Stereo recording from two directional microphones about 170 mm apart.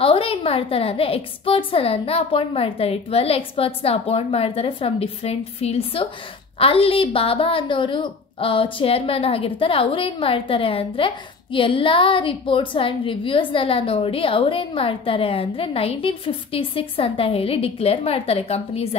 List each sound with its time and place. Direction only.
0.0 s a woman's voice: 35° left (ahead or behind)